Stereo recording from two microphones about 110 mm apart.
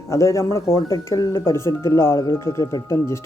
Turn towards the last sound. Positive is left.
turn(degrees=25)  # may be behind; listen again after turning